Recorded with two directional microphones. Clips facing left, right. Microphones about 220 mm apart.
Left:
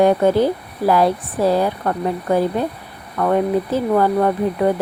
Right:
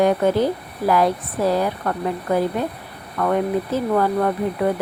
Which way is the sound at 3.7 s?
25° left (ahead or behind).